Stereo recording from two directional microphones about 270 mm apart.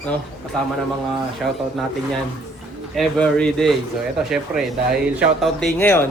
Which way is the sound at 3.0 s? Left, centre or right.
Centre.